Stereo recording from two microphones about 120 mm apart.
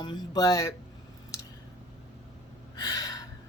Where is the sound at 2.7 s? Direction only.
35° left (ahead or behind).